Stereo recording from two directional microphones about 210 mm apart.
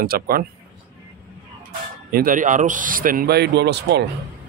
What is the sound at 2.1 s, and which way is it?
A man's voice, 45° right (ahead or behind).